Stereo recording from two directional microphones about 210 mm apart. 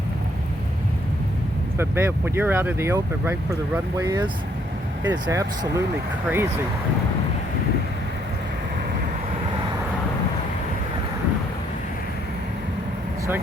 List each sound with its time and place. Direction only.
1.8 s speech: 10° right (ahead or behind)